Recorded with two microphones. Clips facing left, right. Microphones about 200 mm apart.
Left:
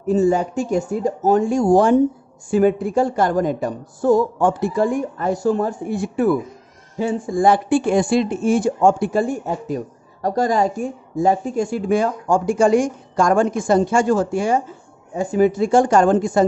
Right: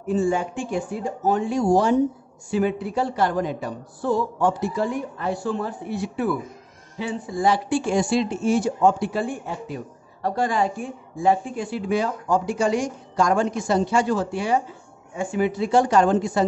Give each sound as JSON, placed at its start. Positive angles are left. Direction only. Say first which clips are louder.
{"t": 0.0, "sound": "speech", "louder": "left 5 dB", "side_deg": 40}